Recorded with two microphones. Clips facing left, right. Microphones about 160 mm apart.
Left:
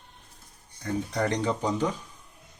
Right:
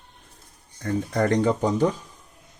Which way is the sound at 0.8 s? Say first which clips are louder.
Right 4 dB; 50° right (ahead or behind).